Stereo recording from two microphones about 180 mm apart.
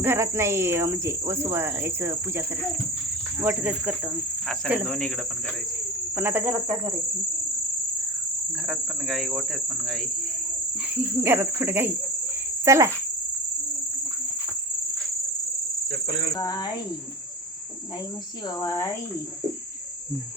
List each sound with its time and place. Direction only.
0.0 s speech: 15° right (ahead or behind)
3.4 s speech: 10° right (ahead or behind)
4.9 s speech: 5° left (ahead or behind)
6.1 s speech: 10° right (ahead or behind)
8.6 s cricket: centre (ahead or behind)
10.9 s speech: 10° right (ahead or behind)
12.6 s cricket: 15° right (ahead or behind)
16.3 s cricket: 20° left (ahead or behind)
18.6 s speech: 15° left (ahead or behind)